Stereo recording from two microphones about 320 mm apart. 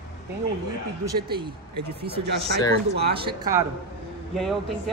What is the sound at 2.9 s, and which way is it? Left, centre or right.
Speech, right.